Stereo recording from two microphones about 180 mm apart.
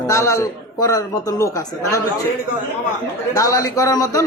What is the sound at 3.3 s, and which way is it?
Speech, 20° left (ahead or behind).